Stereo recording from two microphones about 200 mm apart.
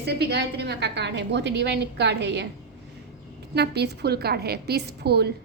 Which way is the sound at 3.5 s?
55° right (ahead or behind).